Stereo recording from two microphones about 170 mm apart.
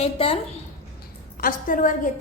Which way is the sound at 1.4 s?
55° left (ahead or behind).